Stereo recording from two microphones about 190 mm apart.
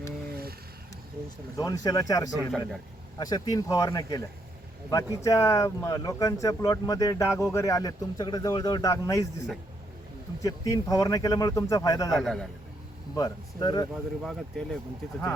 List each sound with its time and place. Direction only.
0.3 s a sound: 55° right (ahead or behind)
1.5 s speech: 20° left (ahead or behind)
2.5 s speech: centre (ahead or behind)
3.2 s speech: 20° left (ahead or behind)
5.2 s speech: 15° left (ahead or behind)
12.1 s speech: centre (ahead or behind)
13.1 s speech: 20° left (ahead or behind)
13.9 s speech: centre (ahead or behind)